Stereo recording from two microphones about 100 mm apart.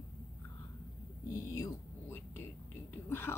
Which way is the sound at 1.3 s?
35° left (ahead or behind).